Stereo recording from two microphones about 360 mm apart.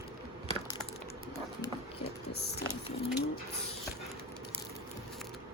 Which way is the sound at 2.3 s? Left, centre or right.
Left.